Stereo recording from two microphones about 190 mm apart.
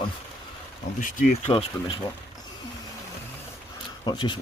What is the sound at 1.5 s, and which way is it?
Speech, 25° left (ahead or behind).